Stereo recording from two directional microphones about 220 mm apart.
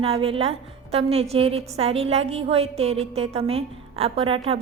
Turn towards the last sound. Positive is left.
turn(degrees=-25)  # may be behind; listen again after turning